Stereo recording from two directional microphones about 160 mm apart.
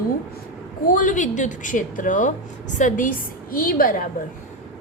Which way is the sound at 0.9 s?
55° left (ahead or behind).